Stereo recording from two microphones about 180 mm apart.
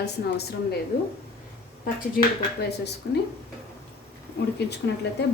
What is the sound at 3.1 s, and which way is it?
Speech, 70° left (ahead or behind).